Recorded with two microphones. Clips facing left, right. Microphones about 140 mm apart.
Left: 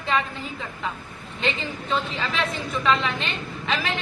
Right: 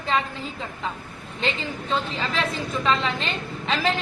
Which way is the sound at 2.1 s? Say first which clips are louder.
Right 1 dB; 35° right (ahead or behind).